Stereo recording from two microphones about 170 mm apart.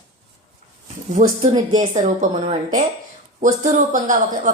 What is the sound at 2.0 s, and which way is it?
A woman's voice, 45° right (ahead or behind).